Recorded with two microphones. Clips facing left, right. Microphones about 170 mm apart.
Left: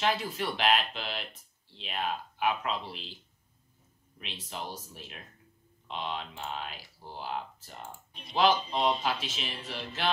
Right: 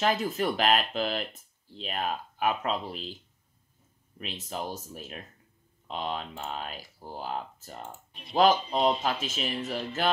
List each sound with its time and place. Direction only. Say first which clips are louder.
0.0 s speech: right 4 dB; 45° right (ahead or behind)
4.2 s speech: right 5 dB; 45° right (ahead or behind)
8.1 s speech: right 4 dB; centre (ahead or behind)
8.4 s speech: right 3 dB; 45° right (ahead or behind)